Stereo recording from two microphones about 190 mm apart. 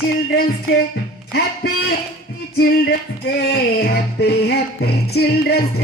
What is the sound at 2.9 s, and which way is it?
Music, 55° left (ahead or behind).